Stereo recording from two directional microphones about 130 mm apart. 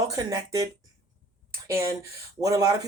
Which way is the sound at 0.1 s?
25° right (ahead or behind).